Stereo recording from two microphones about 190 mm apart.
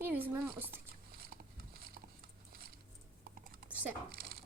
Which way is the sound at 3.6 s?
50° right (ahead or behind).